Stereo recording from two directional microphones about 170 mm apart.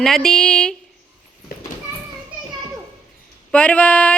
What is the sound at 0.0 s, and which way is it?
Speech, 5° left (ahead or behind).